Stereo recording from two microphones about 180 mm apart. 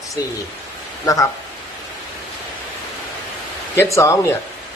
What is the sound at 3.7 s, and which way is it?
Speech, 15° left (ahead or behind).